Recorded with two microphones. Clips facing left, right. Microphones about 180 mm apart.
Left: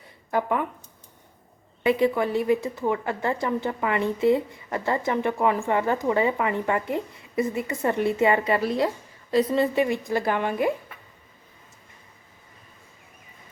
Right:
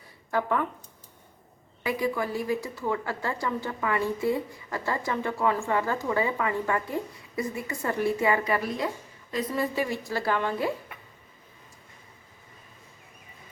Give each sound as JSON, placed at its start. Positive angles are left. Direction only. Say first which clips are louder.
{"t": 0.3, "sound": "a woman's voice", "louder": "left 2 dB", "side_deg": 15}
{"t": 1.8, "sound": "a woman's voice", "louder": "left 7 dB", "side_deg": 25}